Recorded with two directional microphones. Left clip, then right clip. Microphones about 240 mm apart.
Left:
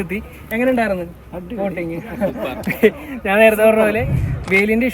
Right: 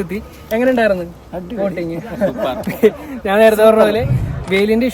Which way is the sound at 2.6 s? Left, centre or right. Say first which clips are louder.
Even; centre.